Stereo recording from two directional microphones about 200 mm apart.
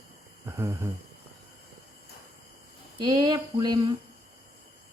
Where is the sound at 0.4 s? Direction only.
15° right (ahead or behind).